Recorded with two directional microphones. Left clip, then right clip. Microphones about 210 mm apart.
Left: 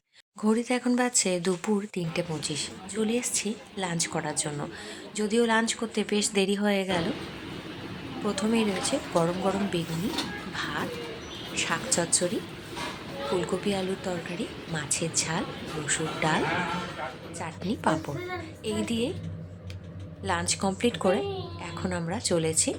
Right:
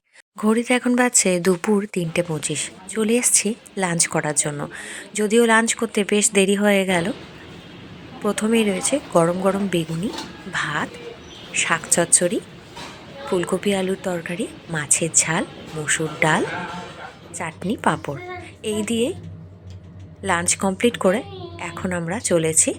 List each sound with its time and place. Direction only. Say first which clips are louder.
0.3 s speech: right 7 dB; 15° right (ahead or behind)
8.2 s speech: right 7 dB; 20° right (ahead or behind)
13.4 s a woman's voice: right 7 dB; 20° right (ahead or behind)
20.2 s speech: right 7 dB; 20° right (ahead or behind)